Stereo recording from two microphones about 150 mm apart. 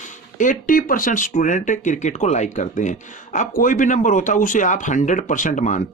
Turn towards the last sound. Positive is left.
turn(degrees=55)  # may be behind; listen again after turning